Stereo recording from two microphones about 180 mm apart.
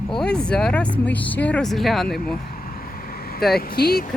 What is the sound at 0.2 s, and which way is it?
Speech, 5° left (ahead or behind).